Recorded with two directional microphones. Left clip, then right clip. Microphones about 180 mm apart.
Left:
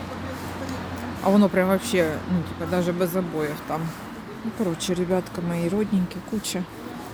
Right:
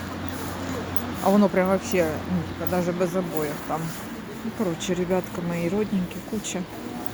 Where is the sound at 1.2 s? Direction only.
25° left (ahead or behind).